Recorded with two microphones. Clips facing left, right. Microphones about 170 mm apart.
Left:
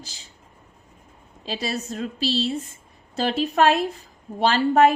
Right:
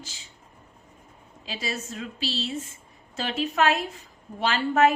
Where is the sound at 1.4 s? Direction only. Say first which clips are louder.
Left 5 dB; 35° left (ahead or behind).